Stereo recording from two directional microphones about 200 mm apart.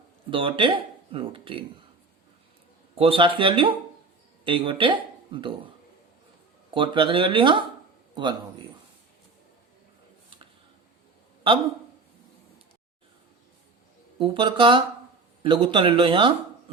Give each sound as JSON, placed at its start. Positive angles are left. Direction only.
{"t": 0.3, "sound": "speech", "side_deg": -25}
{"t": 2.9, "sound": "speech", "side_deg": -30}
{"t": 6.7, "sound": "speech", "side_deg": -25}
{"t": 14.2, "sound": "speech", "side_deg": -25}